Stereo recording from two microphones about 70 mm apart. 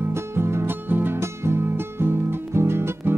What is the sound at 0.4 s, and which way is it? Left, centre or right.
Music, right.